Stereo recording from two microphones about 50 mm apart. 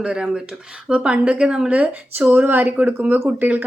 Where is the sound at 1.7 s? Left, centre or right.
Right.